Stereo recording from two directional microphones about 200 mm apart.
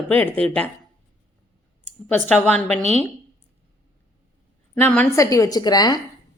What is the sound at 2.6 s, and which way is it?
Speech, 30° right (ahead or behind).